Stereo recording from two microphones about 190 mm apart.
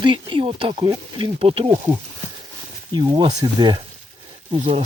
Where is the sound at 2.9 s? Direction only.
25° right (ahead or behind).